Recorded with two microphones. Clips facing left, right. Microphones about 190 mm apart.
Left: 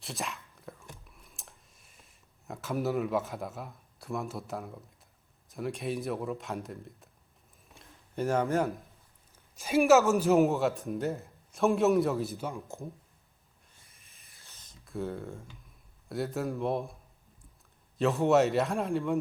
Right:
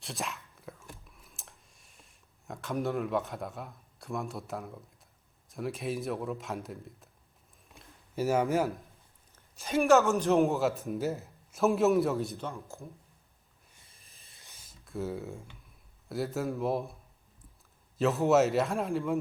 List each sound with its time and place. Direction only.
0.0 s whispering: centre (ahead or behind)
5.5 s a man's voice: centre (ahead or behind)
7.8 s a sound: 5° right (ahead or behind)
9.6 s a woman's voice: 10° left (ahead or behind)
12.5 s a woman's voice: 15° left (ahead or behind)
13.9 s a sound: 35° right (ahead or behind)
14.3 s a sound: 15° right (ahead or behind)
14.8 s a man's voice: centre (ahead or behind)
17.9 s a man's voice: centre (ahead or behind)